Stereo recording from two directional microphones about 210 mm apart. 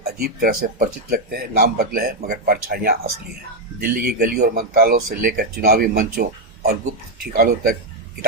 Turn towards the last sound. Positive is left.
turn(degrees=-45)  # may be behind; listen again after turning